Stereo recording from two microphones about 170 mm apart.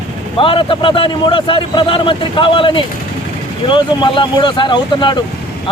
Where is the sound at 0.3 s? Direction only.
30° left (ahead or behind).